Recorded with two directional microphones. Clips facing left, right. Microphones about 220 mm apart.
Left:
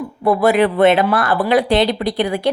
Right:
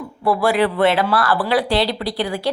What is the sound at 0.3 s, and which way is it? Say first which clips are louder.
Speech: left 3 dB; 20° left (ahead or behind).